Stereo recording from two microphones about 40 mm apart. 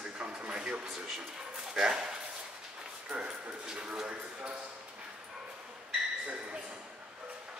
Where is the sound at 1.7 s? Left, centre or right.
Centre; by 4.6 s right.